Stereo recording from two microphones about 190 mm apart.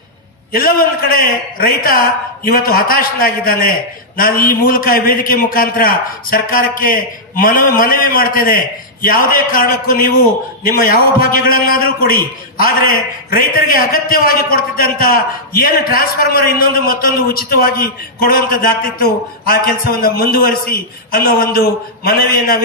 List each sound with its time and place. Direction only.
0.5 s a man's voice: 50° left (ahead or behind)